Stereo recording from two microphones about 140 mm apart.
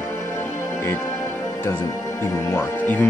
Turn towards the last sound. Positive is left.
turn(degrees=10)  # may be behind; listen again after turning